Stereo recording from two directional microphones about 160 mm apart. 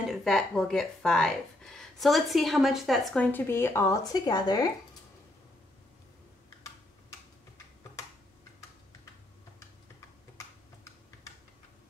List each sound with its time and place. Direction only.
0.1 s speech: 5° left (ahead or behind)
3.3 s speech: 15° left (ahead or behind)
9.6 s typing: 20° left (ahead or behind)